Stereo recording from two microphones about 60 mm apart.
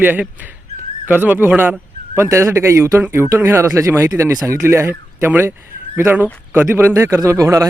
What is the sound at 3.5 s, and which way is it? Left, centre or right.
Speech, right.